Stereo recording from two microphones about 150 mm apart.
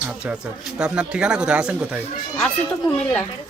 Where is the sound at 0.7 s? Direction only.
5° right (ahead or behind).